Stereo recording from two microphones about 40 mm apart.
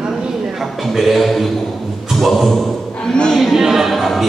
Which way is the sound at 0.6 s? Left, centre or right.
Centre.